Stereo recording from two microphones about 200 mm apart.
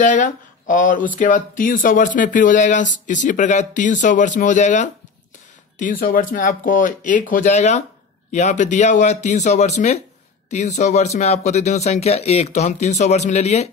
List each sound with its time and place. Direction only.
0.0 s speech: 40° left (ahead or behind)